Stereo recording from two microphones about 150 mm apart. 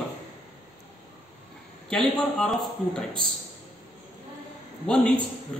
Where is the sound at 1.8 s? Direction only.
5° left (ahead or behind).